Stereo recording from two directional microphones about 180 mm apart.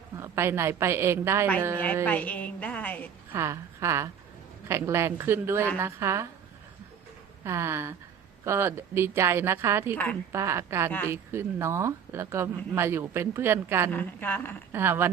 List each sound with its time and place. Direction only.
0.2 s speech: 15° right (ahead or behind)
2.0 s a woman's voice: 10° left (ahead or behind)
3.3 s speech: 15° right (ahead or behind)
7.4 s speech: 15° right (ahead or behind)
13.9 s a woman's voice: 10° left (ahead or behind)
14.7 s speech: 10° right (ahead or behind)